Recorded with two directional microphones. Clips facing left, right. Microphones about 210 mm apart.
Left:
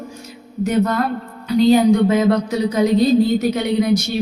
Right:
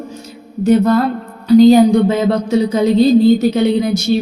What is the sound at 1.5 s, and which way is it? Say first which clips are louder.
Speech: right 5 dB; 35° right (ahead or behind).